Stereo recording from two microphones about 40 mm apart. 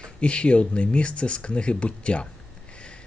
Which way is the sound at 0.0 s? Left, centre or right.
Left.